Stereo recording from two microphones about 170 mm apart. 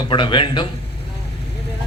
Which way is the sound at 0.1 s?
30° left (ahead or behind).